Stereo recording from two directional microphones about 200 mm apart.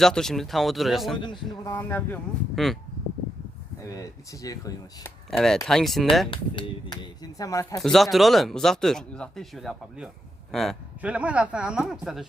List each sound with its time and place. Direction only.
0.0 s speech: centre (ahead or behind)
1.6 s speech: 10° left (ahead or behind)
3.9 s speech: 15° left (ahead or behind)
5.3 s speech: centre (ahead or behind)
6.3 s speech: 25° left (ahead or behind)
7.8 s speech: centre (ahead or behind)